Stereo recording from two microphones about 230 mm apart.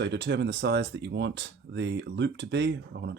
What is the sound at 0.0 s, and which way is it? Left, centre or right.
Speech, right.